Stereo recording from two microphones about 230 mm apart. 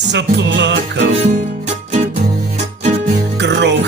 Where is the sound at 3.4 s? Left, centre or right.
Right.